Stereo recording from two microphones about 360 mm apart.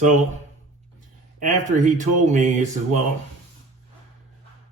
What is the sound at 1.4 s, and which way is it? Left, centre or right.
A man's voice, right.